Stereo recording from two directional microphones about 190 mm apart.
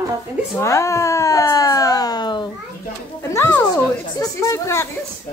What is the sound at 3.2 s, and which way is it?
A child's voice, 15° left (ahead or behind).